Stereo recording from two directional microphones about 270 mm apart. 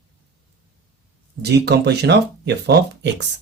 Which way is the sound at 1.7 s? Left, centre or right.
Right.